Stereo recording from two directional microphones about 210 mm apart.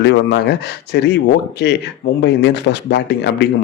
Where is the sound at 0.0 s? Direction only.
55° left (ahead or behind).